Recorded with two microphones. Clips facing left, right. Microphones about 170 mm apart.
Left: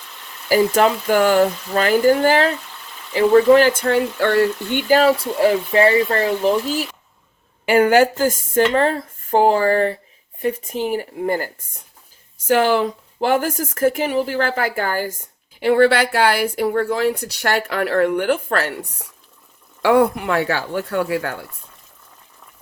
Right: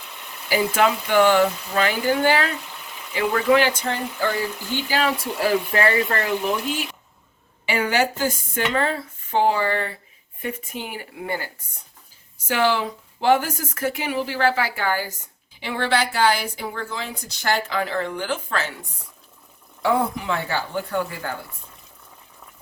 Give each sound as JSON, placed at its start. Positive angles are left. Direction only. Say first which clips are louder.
{"t": 0.4, "sound": "speech", "louder": "left 5 dB", "side_deg": 40}
{"t": 4.9, "sound": "speech", "louder": "left 7 dB", "side_deg": 30}
{"t": 7.6, "sound": "speech", "louder": "left 8 dB", "side_deg": 50}